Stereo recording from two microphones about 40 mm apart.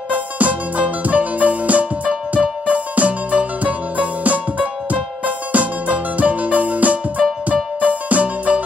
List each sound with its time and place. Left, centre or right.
0.1 s music: right